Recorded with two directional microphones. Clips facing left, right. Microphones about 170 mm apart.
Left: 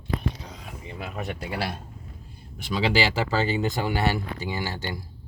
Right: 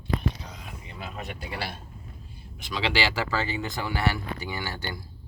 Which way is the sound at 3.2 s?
30° left (ahead or behind).